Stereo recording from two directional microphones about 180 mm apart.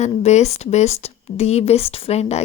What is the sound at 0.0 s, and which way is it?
Speech, 40° left (ahead or behind).